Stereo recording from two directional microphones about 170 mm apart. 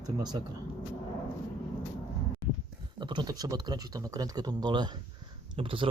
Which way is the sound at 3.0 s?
25° right (ahead or behind).